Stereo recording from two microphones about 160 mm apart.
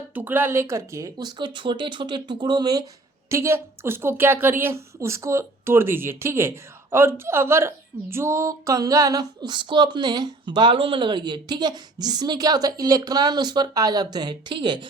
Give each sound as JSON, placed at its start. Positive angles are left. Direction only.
{"t": 0.1, "sound": "a woman's voice", "side_deg": -10}